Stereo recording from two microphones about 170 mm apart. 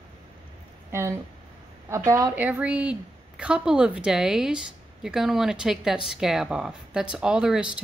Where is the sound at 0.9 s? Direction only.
15° right (ahead or behind).